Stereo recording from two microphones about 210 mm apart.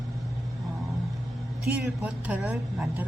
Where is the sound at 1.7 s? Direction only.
5° right (ahead or behind).